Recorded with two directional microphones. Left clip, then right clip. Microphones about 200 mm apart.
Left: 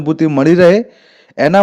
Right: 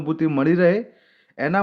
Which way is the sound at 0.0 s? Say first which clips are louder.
Left 9 dB; 35° left (ahead or behind).